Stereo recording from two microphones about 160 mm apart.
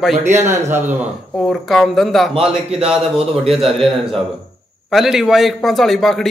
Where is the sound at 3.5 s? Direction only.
Centre (ahead or behind).